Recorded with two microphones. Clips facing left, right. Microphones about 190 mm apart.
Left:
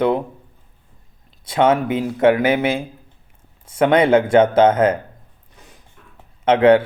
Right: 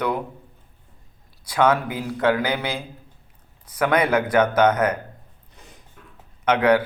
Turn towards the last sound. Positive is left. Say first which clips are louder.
# left 6 dB
turn(degrees=25)  # may be behind; listen again after turning